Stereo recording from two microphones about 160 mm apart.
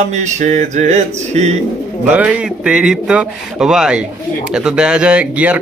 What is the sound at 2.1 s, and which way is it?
Speech, 10° right (ahead or behind).